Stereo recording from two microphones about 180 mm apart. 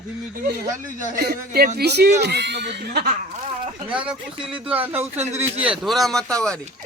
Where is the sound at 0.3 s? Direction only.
60° right (ahead or behind).